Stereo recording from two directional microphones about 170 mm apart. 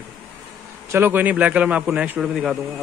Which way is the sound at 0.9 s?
10° right (ahead or behind).